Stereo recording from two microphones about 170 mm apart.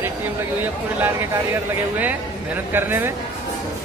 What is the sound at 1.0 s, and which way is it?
A man's voice, 10° right (ahead or behind).